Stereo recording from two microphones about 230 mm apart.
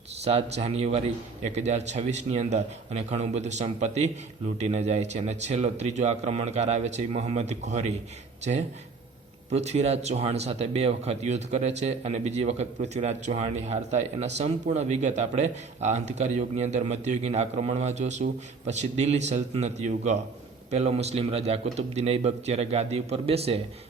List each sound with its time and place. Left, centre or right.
0.3 s speech: right
9.5 s speech: right